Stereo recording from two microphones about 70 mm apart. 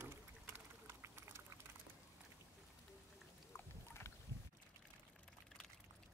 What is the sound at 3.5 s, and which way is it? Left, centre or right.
Boat, left.